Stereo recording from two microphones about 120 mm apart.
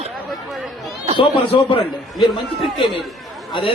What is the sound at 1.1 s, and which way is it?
Speech, 45° left (ahead or behind).